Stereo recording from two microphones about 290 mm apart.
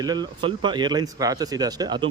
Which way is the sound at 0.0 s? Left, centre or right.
Centre.